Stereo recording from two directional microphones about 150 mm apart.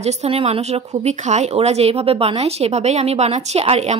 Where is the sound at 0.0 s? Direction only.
45° right (ahead or behind).